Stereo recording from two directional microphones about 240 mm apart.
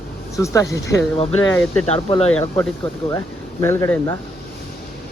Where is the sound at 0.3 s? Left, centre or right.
Centre.